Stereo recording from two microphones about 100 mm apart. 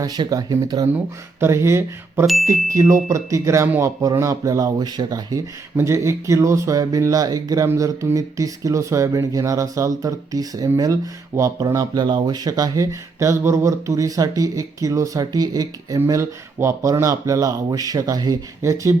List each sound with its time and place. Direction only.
0.0 s speech: 40° right (ahead or behind)
0.9 s speech: 25° right (ahead or behind); by 5.4 s 40° right (ahead or behind)
5.7 s speech: 25° right (ahead or behind)
16.0 s speech: 30° right (ahead or behind)